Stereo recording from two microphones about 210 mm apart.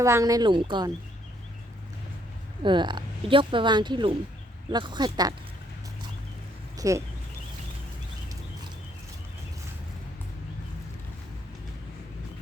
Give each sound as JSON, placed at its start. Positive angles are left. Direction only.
{"t": 0.0, "sound": "speech", "side_deg": -15}
{"t": 2.6, "sound": "a woman's voice", "side_deg": -20}
{"t": 6.7, "sound": "speech", "side_deg": -15}